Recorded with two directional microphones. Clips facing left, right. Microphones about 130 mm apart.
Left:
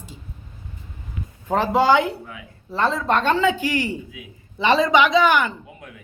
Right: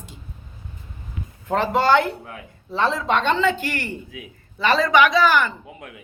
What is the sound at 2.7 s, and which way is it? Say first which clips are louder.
Speech: even; centre (ahead or behind).